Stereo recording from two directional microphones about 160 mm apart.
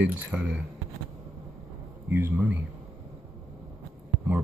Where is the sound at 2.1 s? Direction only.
15° right (ahead or behind).